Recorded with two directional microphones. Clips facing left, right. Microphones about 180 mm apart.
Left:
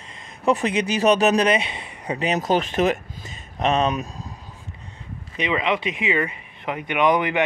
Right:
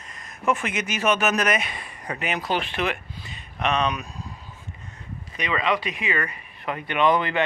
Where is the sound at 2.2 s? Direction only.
40° left (ahead or behind).